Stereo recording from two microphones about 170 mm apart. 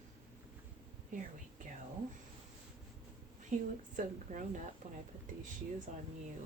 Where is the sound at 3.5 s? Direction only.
50° right (ahead or behind).